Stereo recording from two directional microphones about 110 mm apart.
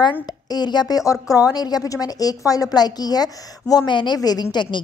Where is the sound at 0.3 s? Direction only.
40° left (ahead or behind).